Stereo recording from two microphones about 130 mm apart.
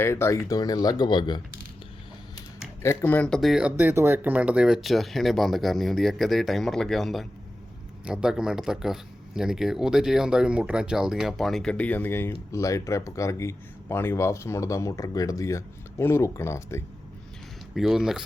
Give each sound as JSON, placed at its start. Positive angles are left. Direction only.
{"t": 0.0, "sound": "speech", "side_deg": 20}
{"t": 2.8, "sound": "speech", "side_deg": 15}
{"t": 17.7, "sound": "speech", "side_deg": -5}